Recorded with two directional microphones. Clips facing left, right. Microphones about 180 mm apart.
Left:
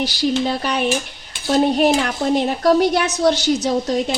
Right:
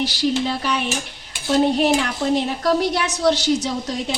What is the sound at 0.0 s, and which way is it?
A child's voice, 45° left (ahead or behind).